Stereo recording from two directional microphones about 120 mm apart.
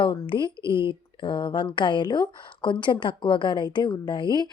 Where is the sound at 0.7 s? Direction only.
45° left (ahead or behind).